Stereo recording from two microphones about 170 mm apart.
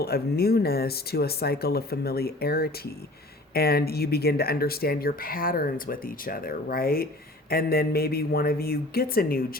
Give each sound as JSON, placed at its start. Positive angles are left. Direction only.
{"t": 0.0, "sound": "speech", "side_deg": 65}